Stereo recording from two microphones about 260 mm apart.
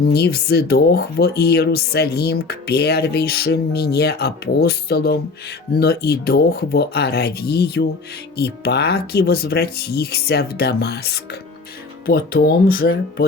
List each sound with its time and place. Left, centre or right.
0.0 s speech: left